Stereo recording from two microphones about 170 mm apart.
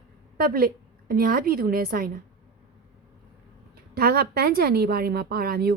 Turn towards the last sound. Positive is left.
turn(degrees=-65)  # may be behind; listen again after turning